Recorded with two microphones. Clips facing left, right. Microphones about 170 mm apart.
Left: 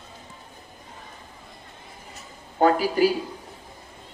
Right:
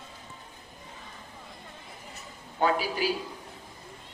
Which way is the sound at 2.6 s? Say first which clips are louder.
Left 7 dB; 45° left (ahead or behind).